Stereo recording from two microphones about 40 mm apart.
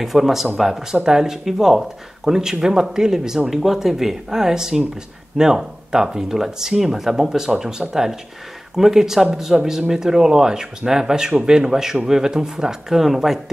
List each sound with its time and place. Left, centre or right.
0.0 s speech: centre
1.0 s speech: centre